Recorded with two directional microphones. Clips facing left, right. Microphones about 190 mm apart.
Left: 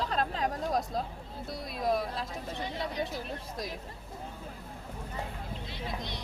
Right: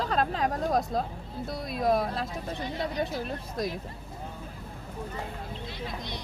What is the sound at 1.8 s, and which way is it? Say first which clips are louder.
Speech: right 4 dB; 50° right (ahead or behind).